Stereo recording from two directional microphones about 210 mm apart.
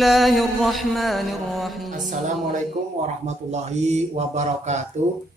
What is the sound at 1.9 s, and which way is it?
Speech, 35° right (ahead or behind).